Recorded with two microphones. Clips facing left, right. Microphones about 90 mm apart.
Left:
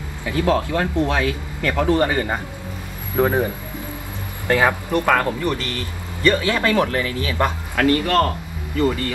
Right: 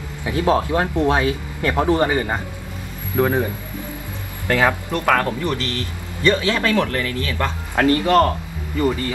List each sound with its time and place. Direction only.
0.2 s speech: 25° right (ahead or behind)
3.2 s speech: 15° left (ahead or behind)
4.5 s speech: 15° left (ahead or behind)
7.7 s speech: 25° right (ahead or behind)